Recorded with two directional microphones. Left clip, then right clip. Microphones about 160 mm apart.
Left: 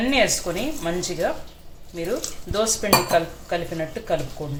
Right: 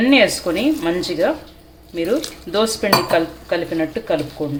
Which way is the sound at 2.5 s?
30° right (ahead or behind).